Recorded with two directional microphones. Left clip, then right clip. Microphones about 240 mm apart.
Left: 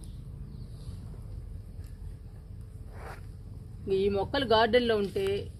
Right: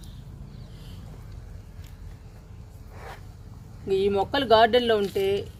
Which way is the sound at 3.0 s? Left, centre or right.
Centre.